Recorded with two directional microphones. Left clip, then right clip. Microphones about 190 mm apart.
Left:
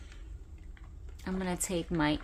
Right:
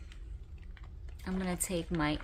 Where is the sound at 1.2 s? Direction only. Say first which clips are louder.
Left 2 dB; 25° left (ahead or behind).